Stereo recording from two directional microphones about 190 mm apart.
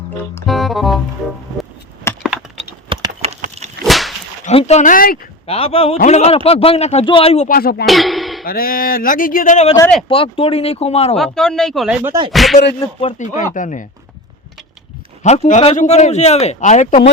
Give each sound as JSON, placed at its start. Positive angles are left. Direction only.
{"t": 0.4, "sound": "speech", "side_deg": 0}
{"t": 2.1, "sound": "a sound", "side_deg": 15}
{"t": 2.6, "sound": "a sound", "side_deg": -30}
{"t": 3.8, "sound": "whip", "side_deg": 0}
{"t": 4.4, "sound": "a man's voice", "side_deg": 35}
{"t": 5.5, "sound": "a man's voice", "side_deg": 30}
{"t": 7.4, "sound": "speech", "side_deg": 50}
{"t": 7.9, "sound": "a sound", "side_deg": 0}
{"t": 8.4, "sound": "speech", "side_deg": 50}
{"t": 10.1, "sound": "a man's voice", "side_deg": 30}
{"t": 11.2, "sound": "speech", "side_deg": 5}
{"t": 12.8, "sound": "a man's voice", "side_deg": 35}
{"t": 15.2, "sound": "a man's voice", "side_deg": 40}